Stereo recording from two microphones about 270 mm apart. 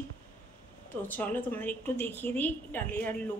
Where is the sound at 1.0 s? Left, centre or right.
Centre.